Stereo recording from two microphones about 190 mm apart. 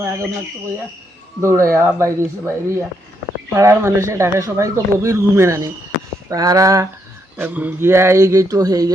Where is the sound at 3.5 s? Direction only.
15° right (ahead or behind).